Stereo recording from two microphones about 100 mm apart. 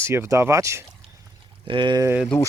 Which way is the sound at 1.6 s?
55° right (ahead or behind).